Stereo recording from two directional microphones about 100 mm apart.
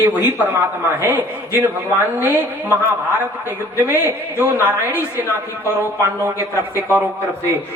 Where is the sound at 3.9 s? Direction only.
20° right (ahead or behind).